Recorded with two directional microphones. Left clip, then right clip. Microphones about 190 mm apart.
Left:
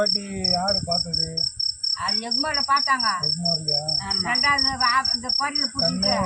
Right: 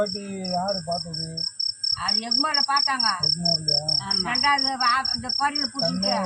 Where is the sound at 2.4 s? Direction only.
10° left (ahead or behind).